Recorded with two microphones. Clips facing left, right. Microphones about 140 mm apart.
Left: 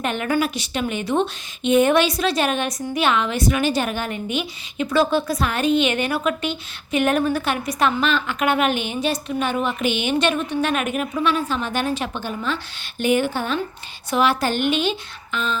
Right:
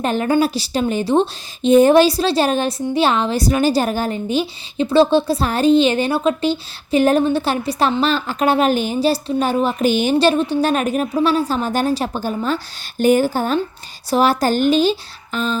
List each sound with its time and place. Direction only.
0.0 s a woman's voice: 35° right (ahead or behind)